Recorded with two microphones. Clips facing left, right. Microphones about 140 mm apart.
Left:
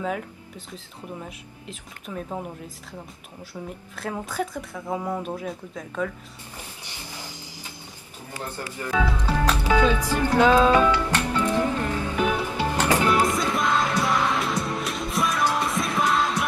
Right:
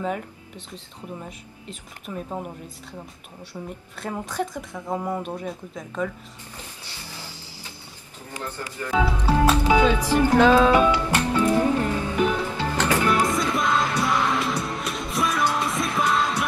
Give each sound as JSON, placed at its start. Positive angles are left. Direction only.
{"t": 0.0, "sound": "speech", "side_deg": 0}
{"t": 3.5, "sound": "speech", "side_deg": 0}
{"t": 6.5, "sound": "train", "side_deg": 15}
{"t": 8.4, "sound": "a man's voice", "side_deg": 15}
{"t": 9.0, "sound": "speech", "side_deg": -10}
{"t": 9.5, "sound": "music", "side_deg": -15}
{"t": 9.9, "sound": "speech", "side_deg": -10}
{"t": 10.7, "sound": "music", "side_deg": -15}
{"t": 12.3, "sound": "music", "side_deg": 15}
{"t": 13.3, "sound": "music", "side_deg": 0}